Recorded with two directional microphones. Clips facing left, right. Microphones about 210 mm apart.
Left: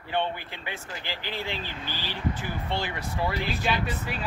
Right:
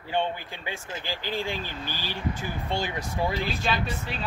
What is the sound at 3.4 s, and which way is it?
Speech, 15° left (ahead or behind).